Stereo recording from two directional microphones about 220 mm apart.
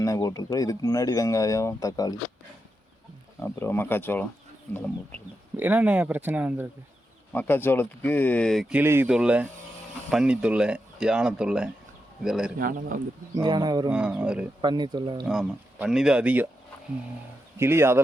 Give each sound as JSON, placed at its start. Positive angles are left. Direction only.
{"t": 0.0, "sound": "speech", "side_deg": 15}
{"t": 3.4, "sound": "speech", "side_deg": 10}
{"t": 5.5, "sound": "speech", "side_deg": -5}
{"t": 7.3, "sound": "speech", "side_deg": 10}
{"t": 8.8, "sound": "speech", "side_deg": -10}
{"t": 12.5, "sound": "a man's voice", "side_deg": -40}
{"t": 13.3, "sound": "speech", "side_deg": -20}
{"t": 13.9, "sound": "speech", "side_deg": -5}
{"t": 14.6, "sound": "speech", "side_deg": -20}
{"t": 15.3, "sound": "speech", "side_deg": -5}
{"t": 17.6, "sound": "speech", "side_deg": -10}